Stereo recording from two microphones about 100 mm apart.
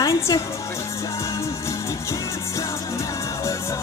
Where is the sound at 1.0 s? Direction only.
30° left (ahead or behind).